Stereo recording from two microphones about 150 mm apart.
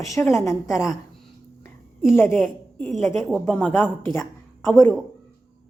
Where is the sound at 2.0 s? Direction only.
15° left (ahead or behind).